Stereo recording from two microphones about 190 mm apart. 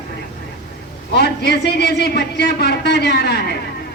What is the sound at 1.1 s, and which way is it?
A man's voice, 60° left (ahead or behind).